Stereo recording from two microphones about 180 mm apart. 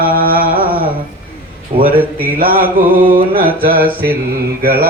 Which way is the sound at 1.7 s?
60° right (ahead or behind).